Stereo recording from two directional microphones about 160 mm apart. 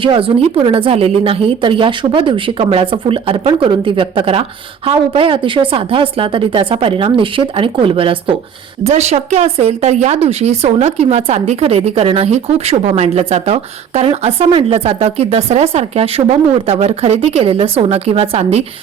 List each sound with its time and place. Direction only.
0.0 s speech: 35° right (ahead or behind)